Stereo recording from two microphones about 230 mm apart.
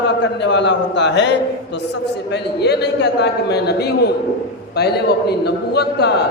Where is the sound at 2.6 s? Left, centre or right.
Left.